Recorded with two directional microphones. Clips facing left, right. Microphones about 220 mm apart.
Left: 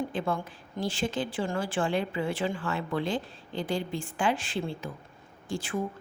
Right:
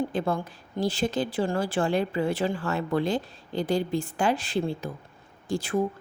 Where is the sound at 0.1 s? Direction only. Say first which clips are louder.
Right 3 dB; 40° right (ahead or behind).